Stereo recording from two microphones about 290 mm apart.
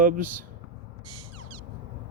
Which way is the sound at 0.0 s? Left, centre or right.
Right.